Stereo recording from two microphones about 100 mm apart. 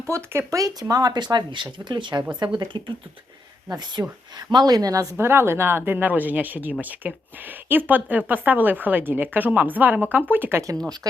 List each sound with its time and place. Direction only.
0.0 s speech: 25° right (ahead or behind); by 2.9 s 50° right (ahead or behind)
4.0 s a woman's voice: 30° right (ahead or behind)
4.4 s speech: 40° right (ahead or behind)
5.1 s a woman's voice: 25° right (ahead or behind)
11.1 s speech: 35° right (ahead or behind)